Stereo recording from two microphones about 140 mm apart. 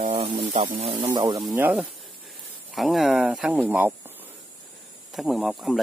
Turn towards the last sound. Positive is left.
turn(degrees=0)  # may be behind; listen again after turning